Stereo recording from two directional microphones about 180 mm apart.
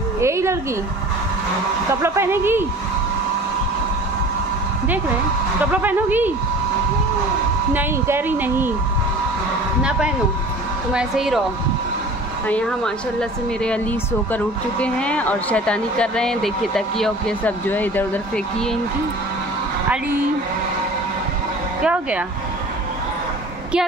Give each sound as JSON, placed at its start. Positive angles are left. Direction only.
{"t": 0.2, "sound": "a sound", "side_deg": -15}
{"t": 1.9, "sound": "speech", "side_deg": -15}
{"t": 5.7, "sound": "speech", "side_deg": -10}
{"t": 7.7, "sound": "speech", "side_deg": -10}
{"t": 9.8, "sound": "speech", "side_deg": -5}
{"t": 12.4, "sound": "speech", "side_deg": 5}
{"t": 21.8, "sound": "speech", "side_deg": -5}